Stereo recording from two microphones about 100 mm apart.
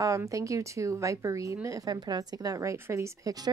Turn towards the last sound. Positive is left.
turn(degrees=-30)  # may be behind; listen again after turning